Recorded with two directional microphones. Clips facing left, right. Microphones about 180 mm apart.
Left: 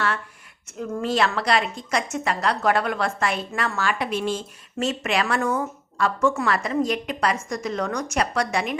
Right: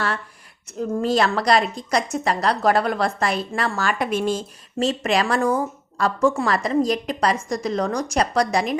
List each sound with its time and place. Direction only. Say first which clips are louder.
0.8 s a woman's voice: right 3 dB; 35° right (ahead or behind)